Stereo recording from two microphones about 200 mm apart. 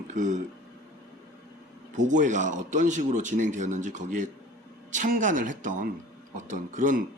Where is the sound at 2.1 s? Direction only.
40° right (ahead or behind).